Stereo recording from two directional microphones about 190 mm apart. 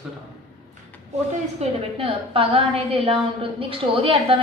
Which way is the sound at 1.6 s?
35° right (ahead or behind).